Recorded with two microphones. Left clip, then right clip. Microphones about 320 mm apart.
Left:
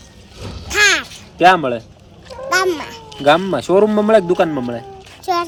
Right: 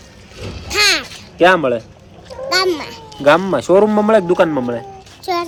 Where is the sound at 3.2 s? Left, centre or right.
Centre.